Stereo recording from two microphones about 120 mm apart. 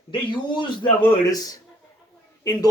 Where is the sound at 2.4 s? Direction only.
30° left (ahead or behind).